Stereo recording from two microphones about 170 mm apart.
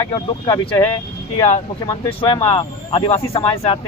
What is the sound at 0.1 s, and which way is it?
Speech, 25° left (ahead or behind).